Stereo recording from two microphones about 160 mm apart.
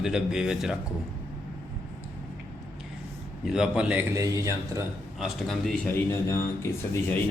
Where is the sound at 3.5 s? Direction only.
5° right (ahead or behind).